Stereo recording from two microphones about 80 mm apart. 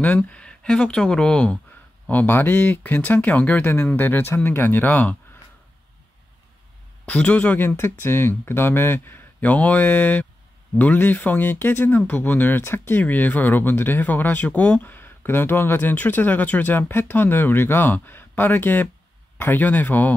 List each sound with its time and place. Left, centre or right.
0.0 s speech: centre
7.1 s speech: centre